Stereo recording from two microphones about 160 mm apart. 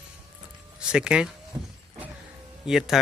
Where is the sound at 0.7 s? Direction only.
5° right (ahead or behind).